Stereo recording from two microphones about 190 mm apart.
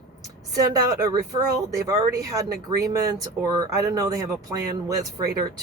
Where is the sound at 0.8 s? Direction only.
20° right (ahead or behind).